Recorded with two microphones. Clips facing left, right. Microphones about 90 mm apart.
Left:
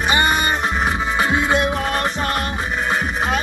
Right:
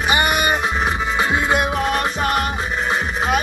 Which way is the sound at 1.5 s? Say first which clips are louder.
Even; 20° right (ahead or behind).